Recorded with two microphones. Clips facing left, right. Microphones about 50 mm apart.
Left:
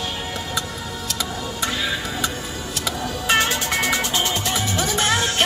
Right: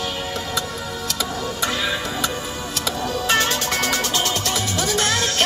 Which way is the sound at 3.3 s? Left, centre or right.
Centre.